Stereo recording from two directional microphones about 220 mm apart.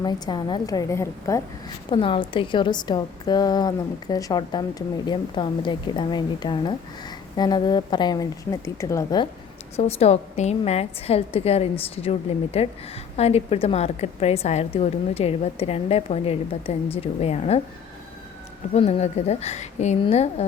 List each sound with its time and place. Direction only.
0.0 s a woman's voice: 20° left (ahead or behind)
9.7 s a woman's voice: 30° left (ahead or behind)
18.7 s a woman's voice: 30° left (ahead or behind)